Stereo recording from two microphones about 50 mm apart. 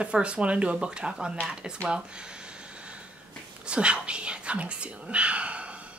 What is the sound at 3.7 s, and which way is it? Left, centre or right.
Speech, right.